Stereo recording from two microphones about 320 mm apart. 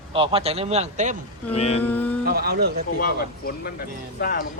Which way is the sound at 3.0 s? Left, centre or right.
Left.